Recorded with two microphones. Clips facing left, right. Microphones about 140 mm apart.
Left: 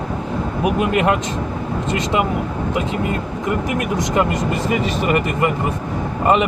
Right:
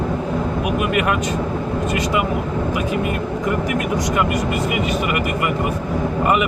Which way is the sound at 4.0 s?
25° left (ahead or behind).